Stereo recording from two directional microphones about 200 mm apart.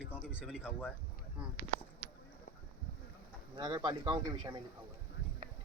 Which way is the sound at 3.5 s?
20° right (ahead or behind).